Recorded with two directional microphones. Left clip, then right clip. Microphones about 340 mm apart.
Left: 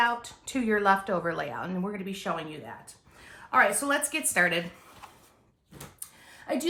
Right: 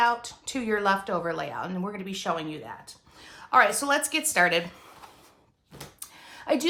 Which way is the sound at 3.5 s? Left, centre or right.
Centre.